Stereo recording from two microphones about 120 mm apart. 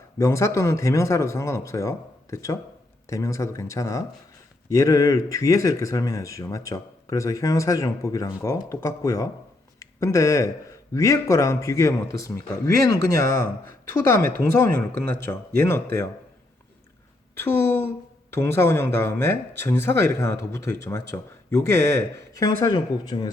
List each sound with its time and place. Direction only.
0.2 s a man's voice: 25° left (ahead or behind)
17.3 s a man's voice: 20° left (ahead or behind); by 23.3 s 35° left (ahead or behind)